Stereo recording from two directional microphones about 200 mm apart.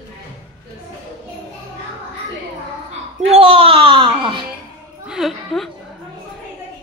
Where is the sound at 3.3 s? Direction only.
30° right (ahead or behind).